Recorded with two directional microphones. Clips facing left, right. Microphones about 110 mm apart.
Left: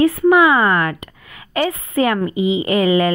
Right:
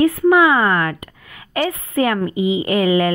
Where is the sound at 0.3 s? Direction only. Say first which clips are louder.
Left 1 dB; 20° left (ahead or behind).